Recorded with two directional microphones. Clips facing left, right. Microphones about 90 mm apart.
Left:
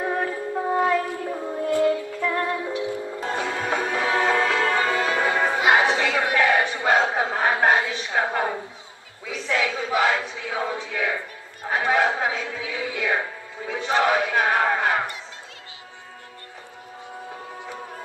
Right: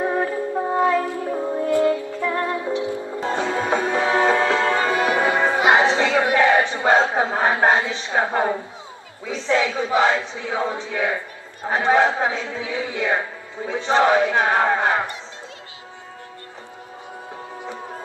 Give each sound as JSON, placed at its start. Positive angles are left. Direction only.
{"t": 0.0, "sound": "music", "side_deg": -20}
{"t": 9.2, "sound": "speech", "side_deg": -25}